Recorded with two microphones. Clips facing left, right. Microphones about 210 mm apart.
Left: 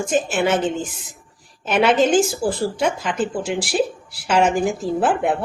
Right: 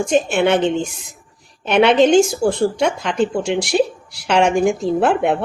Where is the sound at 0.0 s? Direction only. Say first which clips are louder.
Right 4 dB; 5° left (ahead or behind).